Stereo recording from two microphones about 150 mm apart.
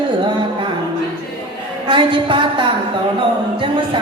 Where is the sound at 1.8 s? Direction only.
35° right (ahead or behind).